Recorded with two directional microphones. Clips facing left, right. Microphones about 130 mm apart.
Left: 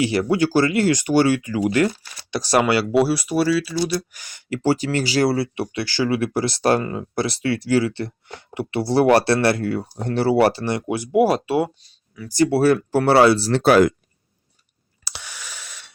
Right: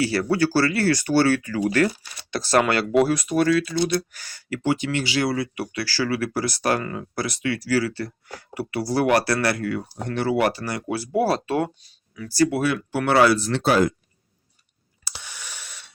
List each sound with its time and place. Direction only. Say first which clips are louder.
0.0 s speech: left 2 dB; 15° left (ahead or behind)
4.1 s speech: left 3 dB; 15° left (ahead or behind)
11.8 s a sound: even; centre (ahead or behind)
12.5 s speech: left 7 dB; 35° left (ahead or behind)
13.6 s speech: left 6 dB; 70° left (ahead or behind)
15.0 s a sound: left 2 dB; 80° left